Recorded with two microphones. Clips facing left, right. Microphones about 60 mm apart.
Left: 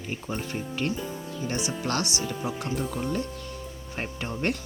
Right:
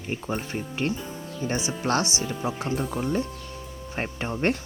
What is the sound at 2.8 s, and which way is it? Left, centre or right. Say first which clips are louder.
Speech: right 2 dB; centre.